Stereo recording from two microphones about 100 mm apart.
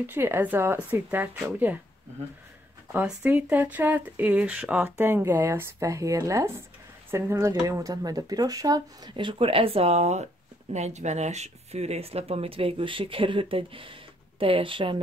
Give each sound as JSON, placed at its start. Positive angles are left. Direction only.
{"t": 0.0, "sound": "speech", "side_deg": -20}
{"t": 3.1, "sound": "speech", "side_deg": -15}
{"t": 9.1, "sound": "speech", "side_deg": -60}